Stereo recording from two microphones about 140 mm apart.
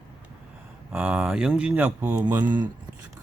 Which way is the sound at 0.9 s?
10° right (ahead or behind).